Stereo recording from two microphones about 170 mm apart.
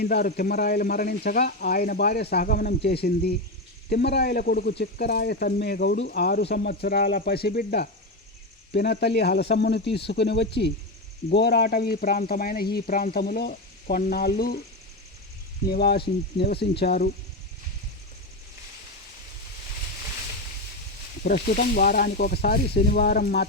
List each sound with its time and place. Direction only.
0.0 s speech: 65° left (ahead or behind)
8.7 s speech: 70° left (ahead or behind)
10.1 s speech: 90° left
11.3 s speech: 75° left (ahead or behind)
15.6 s speech: 65° left (ahead or behind)
21.2 s speech: 60° left (ahead or behind)